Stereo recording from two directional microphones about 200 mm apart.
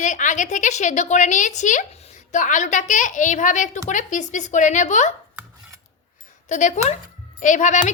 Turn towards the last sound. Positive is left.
turn(degrees=40)  # may be behind; listen again after turning